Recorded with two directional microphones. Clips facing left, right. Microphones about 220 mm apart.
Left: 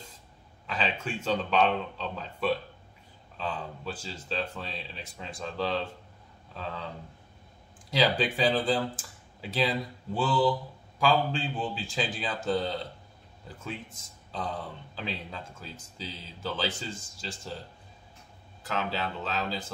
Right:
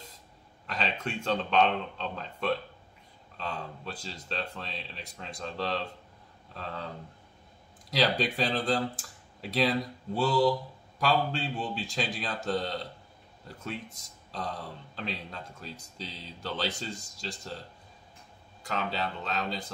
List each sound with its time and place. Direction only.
0.7 s speech: centre (ahead or behind)
7.9 s speech: centre (ahead or behind)
13.9 s speech: centre (ahead or behind)
18.7 s speech: 5° left (ahead or behind)